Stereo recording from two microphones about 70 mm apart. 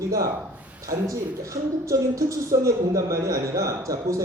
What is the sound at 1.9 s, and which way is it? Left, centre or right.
A man's voice, right.